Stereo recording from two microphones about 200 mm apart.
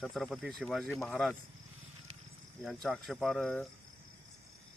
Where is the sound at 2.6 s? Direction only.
Centre (ahead or behind).